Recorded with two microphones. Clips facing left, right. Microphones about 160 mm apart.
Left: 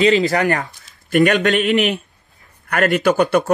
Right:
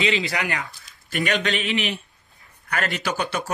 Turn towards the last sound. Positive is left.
turn(degrees=50)  # may be behind; listen again after turning